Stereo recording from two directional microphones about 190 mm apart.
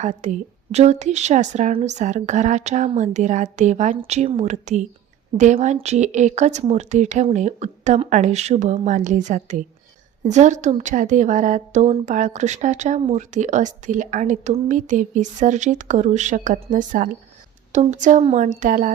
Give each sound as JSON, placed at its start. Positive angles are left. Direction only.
{"t": 0.0, "sound": "a woman's voice", "side_deg": -40}